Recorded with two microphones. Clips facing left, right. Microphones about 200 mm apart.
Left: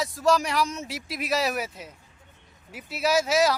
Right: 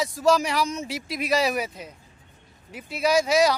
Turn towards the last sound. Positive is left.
turn(degrees=5)  # may be behind; listen again after turning